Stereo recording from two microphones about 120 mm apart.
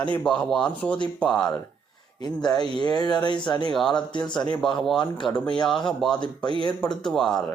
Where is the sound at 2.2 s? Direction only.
35° left (ahead or behind).